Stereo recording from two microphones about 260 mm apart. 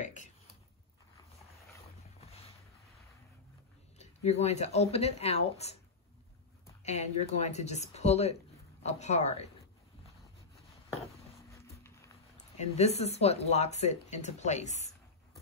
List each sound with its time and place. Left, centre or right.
0.0 s a sound: left
4.0 s speech: left
6.8 s speech: left
11.7 s horse: centre
12.5 s speech: left